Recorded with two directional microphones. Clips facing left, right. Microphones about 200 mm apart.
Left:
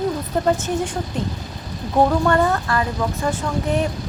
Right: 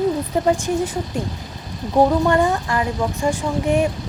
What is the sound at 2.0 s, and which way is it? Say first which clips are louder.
Speech: right 1 dB; 15° right (ahead or behind).